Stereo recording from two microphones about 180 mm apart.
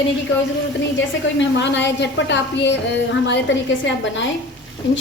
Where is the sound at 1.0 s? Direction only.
85° left.